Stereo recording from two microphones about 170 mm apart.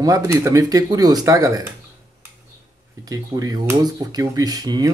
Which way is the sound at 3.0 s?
20° right (ahead or behind).